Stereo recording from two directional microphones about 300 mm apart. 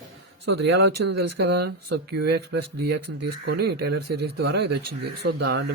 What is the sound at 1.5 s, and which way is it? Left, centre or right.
Speech, right.